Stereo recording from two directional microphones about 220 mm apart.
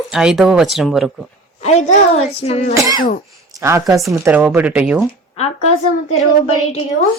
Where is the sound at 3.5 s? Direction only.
15° right (ahead or behind).